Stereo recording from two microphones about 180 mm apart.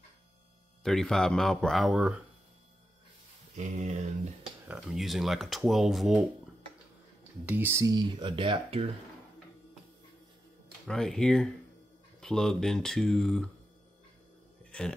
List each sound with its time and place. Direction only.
0.8 s speech: 5° left (ahead or behind)
3.5 s speech: 40° right (ahead or behind)
4.6 s speech: centre (ahead or behind)
7.4 s speech: 10° right (ahead or behind); by 8.8 s 30° right (ahead or behind)
10.9 s speech: 5° left (ahead or behind)
14.6 s a sound: 5° left (ahead or behind)